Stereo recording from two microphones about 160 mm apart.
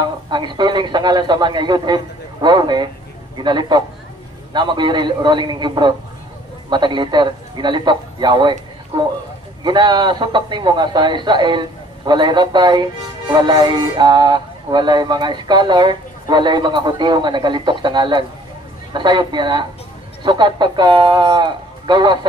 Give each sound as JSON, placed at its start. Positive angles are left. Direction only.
{"t": 0.3, "sound": "speech", "side_deg": -30}
{"t": 9.6, "sound": "speech", "side_deg": -30}